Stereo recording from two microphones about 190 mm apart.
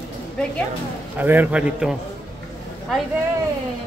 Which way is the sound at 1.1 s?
10° right (ahead or behind).